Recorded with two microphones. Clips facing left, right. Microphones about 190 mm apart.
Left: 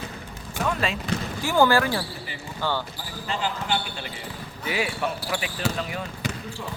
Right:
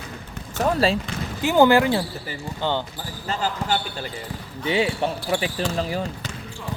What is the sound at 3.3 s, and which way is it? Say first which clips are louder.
Speech: right 3 dB; 40° right (ahead or behind).